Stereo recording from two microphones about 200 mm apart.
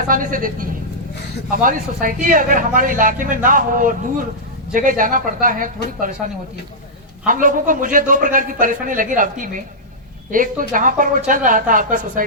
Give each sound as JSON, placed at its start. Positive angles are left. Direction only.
{"t": 0.1, "sound": "speech", "side_deg": -45}
{"t": 7.3, "sound": "speech", "side_deg": -40}